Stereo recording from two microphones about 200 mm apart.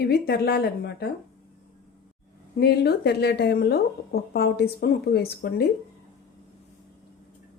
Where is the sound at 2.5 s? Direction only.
55° left (ahead or behind).